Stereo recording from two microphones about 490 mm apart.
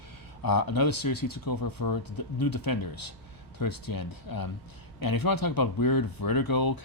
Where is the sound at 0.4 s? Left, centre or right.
Left.